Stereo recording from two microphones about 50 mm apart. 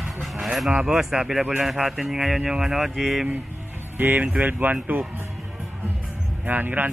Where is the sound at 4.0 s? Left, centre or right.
Right.